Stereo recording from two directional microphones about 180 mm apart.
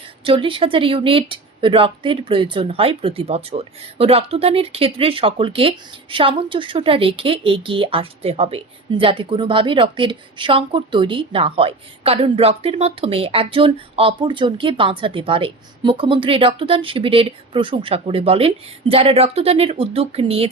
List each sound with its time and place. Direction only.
0.3 s speech: 30° right (ahead or behind)